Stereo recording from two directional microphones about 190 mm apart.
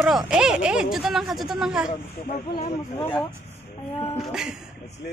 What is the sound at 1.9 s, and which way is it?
Speech, 45° left (ahead or behind).